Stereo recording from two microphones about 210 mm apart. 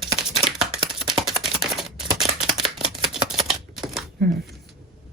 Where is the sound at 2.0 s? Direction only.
25° right (ahead or behind).